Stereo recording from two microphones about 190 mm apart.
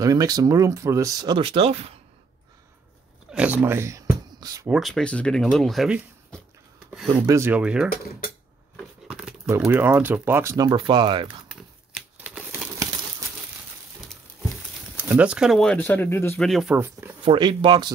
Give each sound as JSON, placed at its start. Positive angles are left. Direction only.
{"t": 0.0, "sound": "speech", "side_deg": -20}
{"t": 3.3, "sound": "a sound", "side_deg": -5}
{"t": 4.6, "sound": "speech", "side_deg": 0}
{"t": 7.1, "sound": "speech", "side_deg": -20}
{"t": 9.0, "sound": "dog", "side_deg": -5}
{"t": 9.6, "sound": "speech", "side_deg": -10}
{"t": 11.9, "sound": "a sound", "side_deg": -5}
{"t": 15.0, "sound": "speech", "side_deg": -10}
{"t": 16.4, "sound": "speech", "side_deg": -5}
{"t": 17.2, "sound": "speech", "side_deg": -25}